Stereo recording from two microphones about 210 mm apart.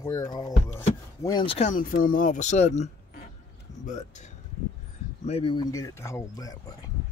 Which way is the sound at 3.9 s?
35° left (ahead or behind).